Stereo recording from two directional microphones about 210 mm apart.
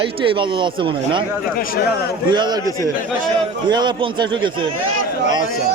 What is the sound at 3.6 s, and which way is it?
Speech, 20° right (ahead or behind).